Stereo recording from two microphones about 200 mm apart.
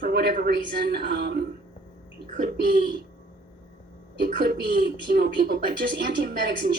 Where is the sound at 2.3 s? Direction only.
45° right (ahead or behind).